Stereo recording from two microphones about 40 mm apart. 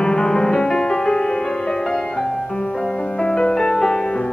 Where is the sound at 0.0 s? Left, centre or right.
Left.